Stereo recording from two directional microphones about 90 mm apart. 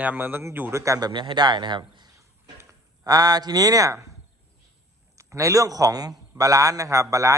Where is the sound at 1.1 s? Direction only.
60° right (ahead or behind).